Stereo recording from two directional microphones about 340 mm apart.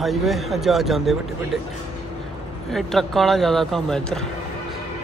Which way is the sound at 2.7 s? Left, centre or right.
Centre.